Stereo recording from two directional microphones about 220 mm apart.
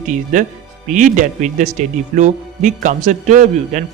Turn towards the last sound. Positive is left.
turn(degrees=-30)  # may be behind; listen again after turning